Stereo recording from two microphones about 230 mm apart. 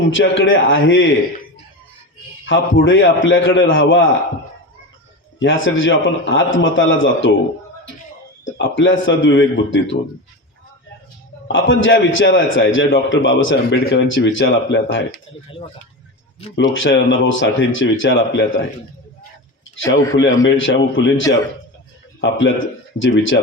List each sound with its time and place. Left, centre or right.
0.1 s a man's voice: left
2.5 s a man's voice: left
5.4 s a man's voice: left
8.5 s speech: left
11.5 s a man's voice: left
16.6 s a man's voice: left
19.7 s a man's voice: left